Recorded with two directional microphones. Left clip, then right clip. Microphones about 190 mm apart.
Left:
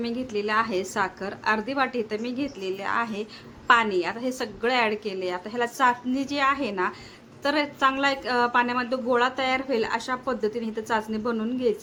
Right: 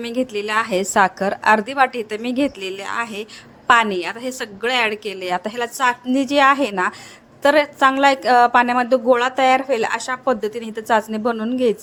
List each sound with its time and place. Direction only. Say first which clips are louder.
0.0 s a woman's voice: right 6 dB; 40° right (ahead or behind)